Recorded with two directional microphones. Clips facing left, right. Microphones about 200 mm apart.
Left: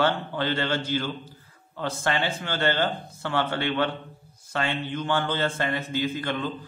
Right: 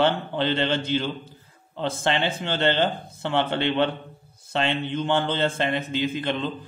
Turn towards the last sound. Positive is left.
turn(degrees=-20)  # may be behind; listen again after turning